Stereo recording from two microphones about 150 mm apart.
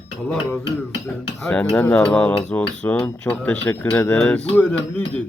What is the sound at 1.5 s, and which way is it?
Speech, 5° left (ahead or behind).